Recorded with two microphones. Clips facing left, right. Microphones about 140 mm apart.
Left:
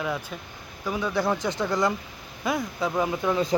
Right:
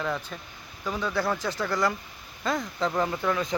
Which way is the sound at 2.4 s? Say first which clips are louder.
Left 1 dB; 10° left (ahead or behind).